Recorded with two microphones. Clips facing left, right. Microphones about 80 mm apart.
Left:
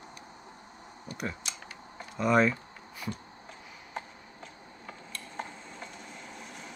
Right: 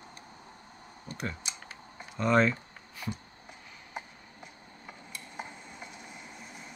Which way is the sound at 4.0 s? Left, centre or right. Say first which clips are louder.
Left 2 dB; centre.